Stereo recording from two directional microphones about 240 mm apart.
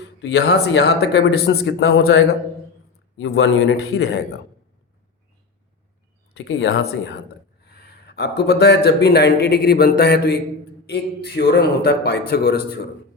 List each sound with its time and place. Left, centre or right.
0.2 s speech: left
6.3 s a man's voice: left